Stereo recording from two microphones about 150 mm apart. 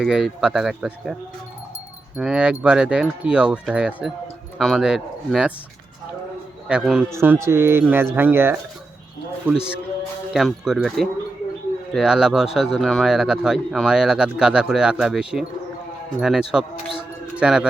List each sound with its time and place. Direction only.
0.0 s speech: 5° right (ahead or behind)
2.1 s speech: 5° right (ahead or behind)
6.7 s speech: 5° right (ahead or behind)
7.1 s speech: 15° right (ahead or behind)
10.3 s a man's voice: 5° right (ahead or behind)